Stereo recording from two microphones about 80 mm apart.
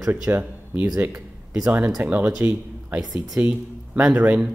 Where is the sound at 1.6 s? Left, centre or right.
Right.